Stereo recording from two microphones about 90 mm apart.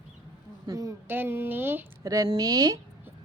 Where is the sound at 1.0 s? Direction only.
25° right (ahead or behind).